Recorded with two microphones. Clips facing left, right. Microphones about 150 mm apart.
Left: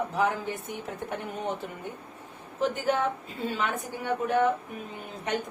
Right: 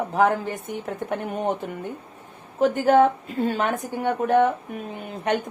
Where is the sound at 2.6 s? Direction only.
55° right (ahead or behind).